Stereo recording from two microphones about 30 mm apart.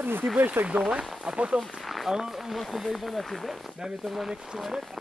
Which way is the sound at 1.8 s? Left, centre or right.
Centre.